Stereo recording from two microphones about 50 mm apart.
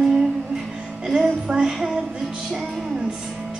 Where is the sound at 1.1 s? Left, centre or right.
Centre.